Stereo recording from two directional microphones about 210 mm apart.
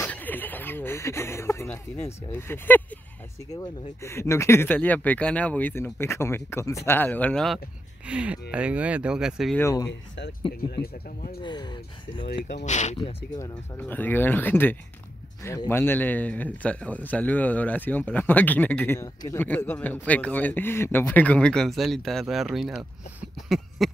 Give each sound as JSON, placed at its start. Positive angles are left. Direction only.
{"t": 0.0, "sound": "a man's voice", "side_deg": 10}
{"t": 9.6, "sound": "a man's voice", "side_deg": 15}
{"t": 9.8, "sound": "speech", "side_deg": 55}
{"t": 10.7, "sound": "speech", "side_deg": 45}
{"t": 11.4, "sound": "speech", "side_deg": 20}
{"t": 12.6, "sound": "speech", "side_deg": 35}
{"t": 13.3, "sound": "a man's voice", "side_deg": 10}
{"t": 23.8, "sound": "a sound", "side_deg": 0}